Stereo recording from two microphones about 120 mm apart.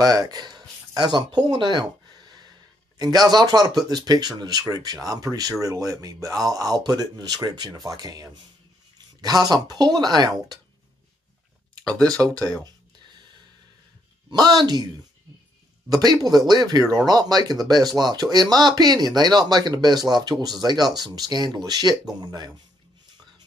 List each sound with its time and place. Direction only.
0.0 s a sound: 35° right (ahead or behind)
3.0 s speech: 35° right (ahead or behind)
12.0 s speech: 10° left (ahead or behind)
14.3 s speech: 35° right (ahead or behind)
15.9 s speech: 35° right (ahead or behind)